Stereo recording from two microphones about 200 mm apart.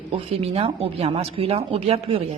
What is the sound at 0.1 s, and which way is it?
A woman's voice, 30° right (ahead or behind).